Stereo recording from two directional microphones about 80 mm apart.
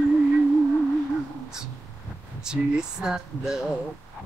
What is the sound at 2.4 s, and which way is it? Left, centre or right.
Mantra, centre.